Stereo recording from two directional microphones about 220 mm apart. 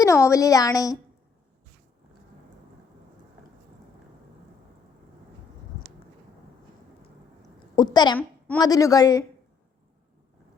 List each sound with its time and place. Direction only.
0.0 s a woman's voice: 15° left (ahead or behind)
7.8 s a woman's voice: 20° left (ahead or behind)